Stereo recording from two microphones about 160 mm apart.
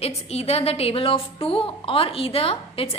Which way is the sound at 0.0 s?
40° left (ahead or behind).